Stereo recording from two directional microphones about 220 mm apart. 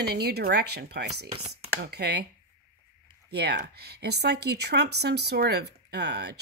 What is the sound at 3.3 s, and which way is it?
Speech, 50° right (ahead or behind).